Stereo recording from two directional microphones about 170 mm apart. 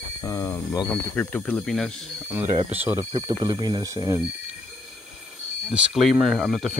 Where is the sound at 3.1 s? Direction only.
25° right (ahead or behind).